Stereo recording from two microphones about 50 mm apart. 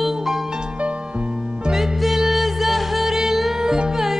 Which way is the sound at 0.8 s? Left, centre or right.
Right.